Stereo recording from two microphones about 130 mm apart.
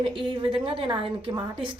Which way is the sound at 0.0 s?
40° right (ahead or behind).